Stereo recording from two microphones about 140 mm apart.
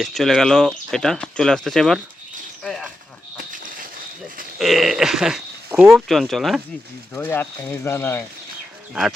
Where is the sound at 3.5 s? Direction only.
75° right (ahead or behind).